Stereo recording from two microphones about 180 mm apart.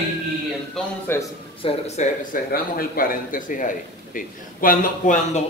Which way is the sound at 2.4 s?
55° left (ahead or behind).